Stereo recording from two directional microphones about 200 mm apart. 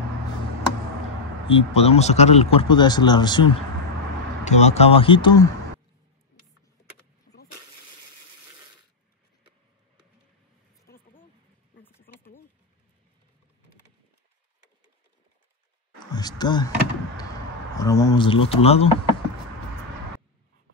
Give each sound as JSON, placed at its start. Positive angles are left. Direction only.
{"t": 1.5, "sound": "speech", "side_deg": 30}
{"t": 4.5, "sound": "speech", "side_deg": 35}
{"t": 16.1, "sound": "a sound", "side_deg": 20}
{"t": 17.7, "sound": "speech", "side_deg": 15}